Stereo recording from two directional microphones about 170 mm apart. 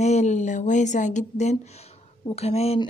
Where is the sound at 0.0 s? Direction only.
45° left (ahead or behind).